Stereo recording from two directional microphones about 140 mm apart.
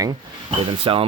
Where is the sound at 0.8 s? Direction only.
40° right (ahead or behind).